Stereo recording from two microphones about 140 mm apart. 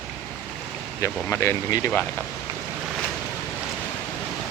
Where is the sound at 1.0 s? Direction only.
20° left (ahead or behind).